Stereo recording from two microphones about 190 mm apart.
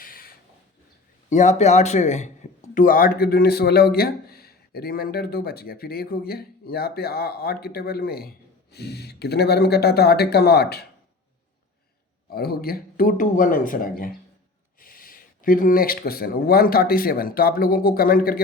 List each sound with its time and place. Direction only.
0.0 s a sound: 50° left (ahead or behind)
1.3 s speech: 40° left (ahead or behind); by 10.8 s 60° left (ahead or behind)
12.3 s speech: 55° left (ahead or behind)